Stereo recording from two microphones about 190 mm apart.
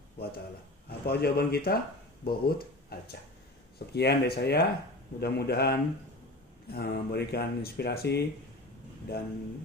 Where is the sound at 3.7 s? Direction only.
60° left (ahead or behind).